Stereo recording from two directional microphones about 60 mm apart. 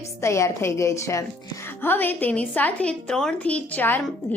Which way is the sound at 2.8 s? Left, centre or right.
Centre.